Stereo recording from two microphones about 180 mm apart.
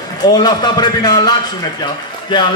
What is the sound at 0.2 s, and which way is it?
A man's voice, 20° left (ahead or behind).